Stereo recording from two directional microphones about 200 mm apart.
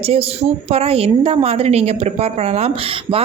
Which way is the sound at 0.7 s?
30° right (ahead or behind).